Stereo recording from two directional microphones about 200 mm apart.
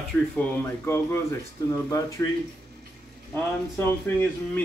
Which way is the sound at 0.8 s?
15° left (ahead or behind).